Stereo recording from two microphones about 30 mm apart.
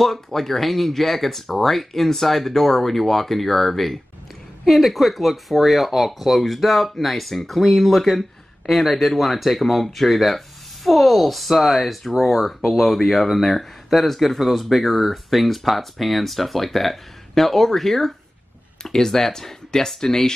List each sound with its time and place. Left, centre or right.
0.0 s speech: centre
14.7 s speech: centre
18.8 s speech: centre